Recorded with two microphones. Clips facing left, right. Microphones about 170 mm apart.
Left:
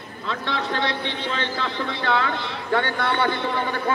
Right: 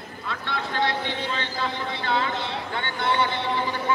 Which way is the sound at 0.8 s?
40° right (ahead or behind).